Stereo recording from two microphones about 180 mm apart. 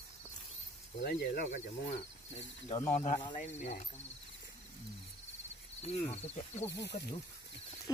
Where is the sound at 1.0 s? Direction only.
50° left (ahead or behind).